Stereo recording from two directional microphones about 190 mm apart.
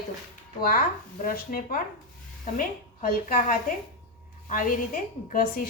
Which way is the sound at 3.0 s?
50° left (ahead or behind).